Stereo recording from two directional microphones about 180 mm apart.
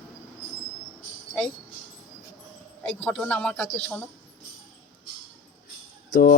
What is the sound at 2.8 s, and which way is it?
Speech, 5° left (ahead or behind).